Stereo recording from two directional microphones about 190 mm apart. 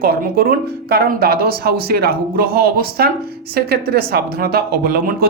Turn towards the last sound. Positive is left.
turn(degrees=-55)  # may be behind; listen again after turning